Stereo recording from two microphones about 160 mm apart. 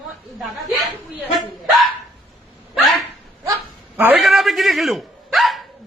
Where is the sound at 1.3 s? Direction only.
Centre (ahead or behind).